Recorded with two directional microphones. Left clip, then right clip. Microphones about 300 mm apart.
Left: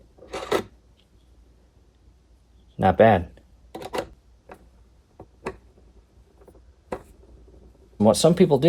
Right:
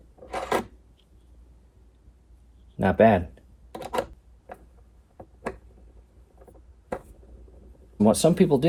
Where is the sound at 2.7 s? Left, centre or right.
Left.